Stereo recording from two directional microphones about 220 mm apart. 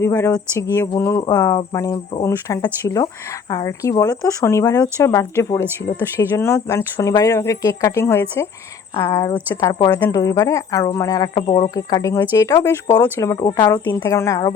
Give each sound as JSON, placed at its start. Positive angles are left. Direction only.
{"t": 0.0, "sound": "speech", "side_deg": 10}